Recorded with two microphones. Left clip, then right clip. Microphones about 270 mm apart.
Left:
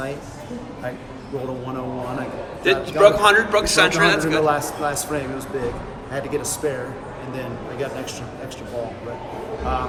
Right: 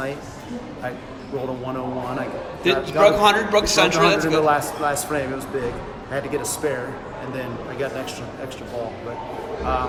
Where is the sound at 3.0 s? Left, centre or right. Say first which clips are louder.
Left 2 dB; right; by 6.7 s centre.